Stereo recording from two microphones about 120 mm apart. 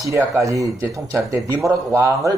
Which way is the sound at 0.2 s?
25° right (ahead or behind).